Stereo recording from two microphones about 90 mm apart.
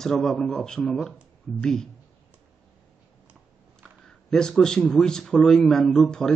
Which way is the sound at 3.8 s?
5° left (ahead or behind).